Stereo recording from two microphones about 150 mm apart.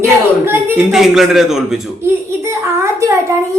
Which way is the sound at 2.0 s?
15° right (ahead or behind).